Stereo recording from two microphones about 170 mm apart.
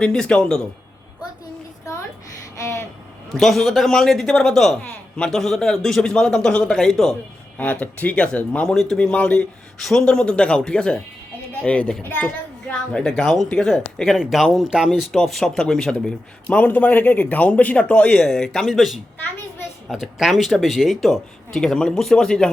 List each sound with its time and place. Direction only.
0.0 s speech: 5° left (ahead or behind)
2.6 s vehicle: 15° left (ahead or behind)
3.3 s a child's voice: centre (ahead or behind)